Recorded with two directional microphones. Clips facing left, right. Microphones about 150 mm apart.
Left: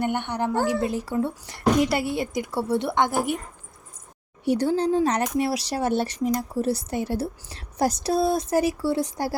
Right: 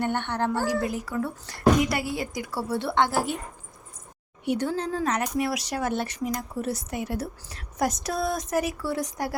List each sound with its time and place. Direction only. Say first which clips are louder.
0.0 s speech: left 1 dB; 15° left (ahead or behind)
4.4 s speech: left 5 dB; 35° left (ahead or behind)